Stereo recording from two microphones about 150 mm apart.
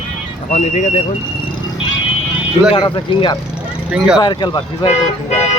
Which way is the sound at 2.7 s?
35° left (ahead or behind).